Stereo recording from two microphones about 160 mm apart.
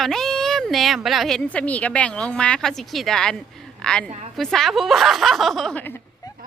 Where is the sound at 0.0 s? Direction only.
Centre (ahead or behind).